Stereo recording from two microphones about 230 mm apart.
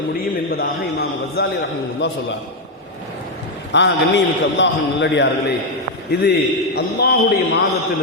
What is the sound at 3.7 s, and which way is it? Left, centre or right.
A man's voice, left.